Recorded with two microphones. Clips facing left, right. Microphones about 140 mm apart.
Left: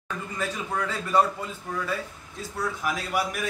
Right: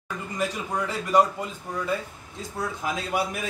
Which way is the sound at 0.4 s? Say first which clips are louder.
Right 2 dB; 15° right (ahead or behind).